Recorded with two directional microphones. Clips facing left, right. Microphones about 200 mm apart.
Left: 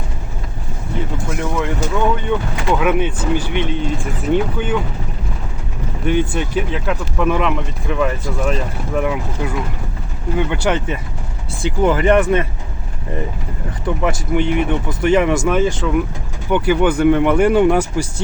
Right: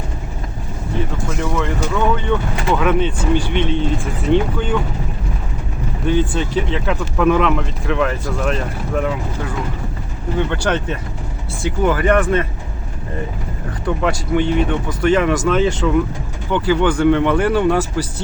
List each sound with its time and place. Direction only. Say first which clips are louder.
1.4 s a sound: even; 15° left (ahead or behind)
2.7 s speech: even; 10° left (ahead or behind)
6.1 s speech: even; 15° left (ahead or behind)
10.3 s speech: left 1 dB; 10° left (ahead or behind)
14.0 s speech: even; 15° left (ahead or behind)